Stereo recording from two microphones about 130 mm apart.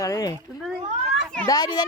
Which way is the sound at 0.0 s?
25° left (ahead or behind).